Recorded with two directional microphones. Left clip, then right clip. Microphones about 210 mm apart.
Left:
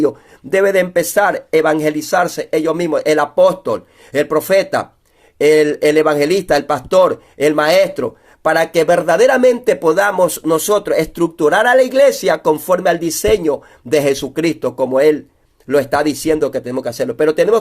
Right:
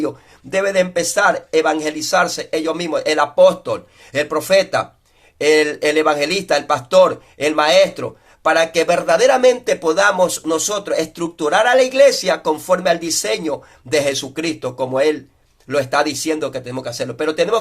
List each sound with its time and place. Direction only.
0.5 s speech: 55° left (ahead or behind)